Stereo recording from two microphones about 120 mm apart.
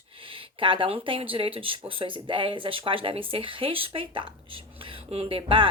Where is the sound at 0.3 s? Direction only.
45° right (ahead or behind).